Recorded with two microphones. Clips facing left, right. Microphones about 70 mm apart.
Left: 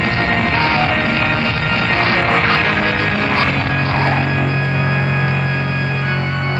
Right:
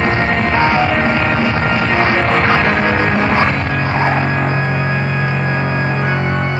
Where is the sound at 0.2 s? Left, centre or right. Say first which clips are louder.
Right 1 dB; centre.